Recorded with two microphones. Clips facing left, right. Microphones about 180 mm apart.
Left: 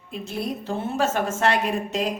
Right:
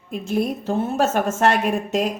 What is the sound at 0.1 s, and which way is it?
Speech, 50° right (ahead or behind).